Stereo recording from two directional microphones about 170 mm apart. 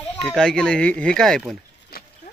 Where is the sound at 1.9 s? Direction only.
65° left (ahead or behind).